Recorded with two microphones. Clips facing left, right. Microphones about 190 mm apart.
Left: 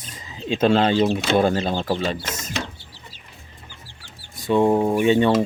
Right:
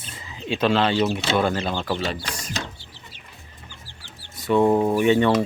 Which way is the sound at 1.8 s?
30° left (ahead or behind).